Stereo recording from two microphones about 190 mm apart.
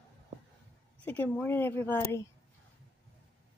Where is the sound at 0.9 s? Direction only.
10° left (ahead or behind).